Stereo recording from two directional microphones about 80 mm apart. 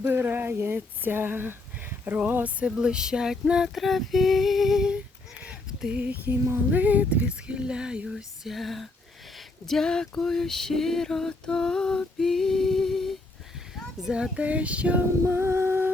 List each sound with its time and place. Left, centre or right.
0.0 s speech: right
2.1 s a sound: centre
2.6 s female singing: centre
9.6 s a sound: centre
14.0 s female singing: centre
15.2 s music: right